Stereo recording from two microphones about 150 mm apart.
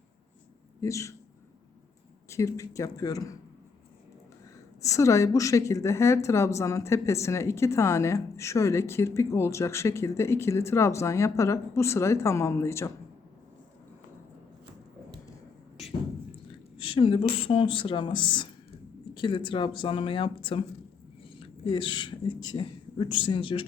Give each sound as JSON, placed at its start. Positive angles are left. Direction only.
{"t": 0.8, "sound": "a woman's voice", "side_deg": 20}
{"t": 2.3, "sound": "a woman's voice", "side_deg": 20}
{"t": 4.8, "sound": "a woman's voice", "side_deg": 20}
{"t": 16.7, "sound": "speech", "side_deg": 35}
{"t": 21.3, "sound": "a sound", "side_deg": 35}
{"t": 22.5, "sound": "speech", "side_deg": 35}